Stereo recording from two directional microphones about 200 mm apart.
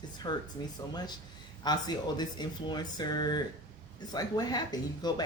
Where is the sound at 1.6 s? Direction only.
20° left (ahead or behind).